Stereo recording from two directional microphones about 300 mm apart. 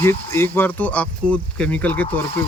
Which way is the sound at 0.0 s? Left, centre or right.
Centre.